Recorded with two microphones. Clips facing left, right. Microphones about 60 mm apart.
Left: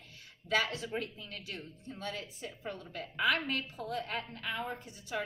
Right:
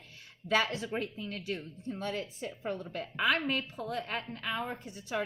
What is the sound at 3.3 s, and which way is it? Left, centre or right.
Speech, right.